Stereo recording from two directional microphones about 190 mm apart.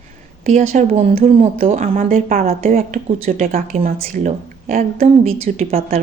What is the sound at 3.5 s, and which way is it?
Speech, 50° right (ahead or behind).